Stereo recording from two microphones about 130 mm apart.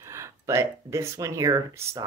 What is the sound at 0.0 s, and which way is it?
Speech, 20° right (ahead or behind).